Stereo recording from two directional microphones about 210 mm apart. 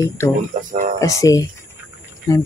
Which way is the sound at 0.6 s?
40° right (ahead or behind).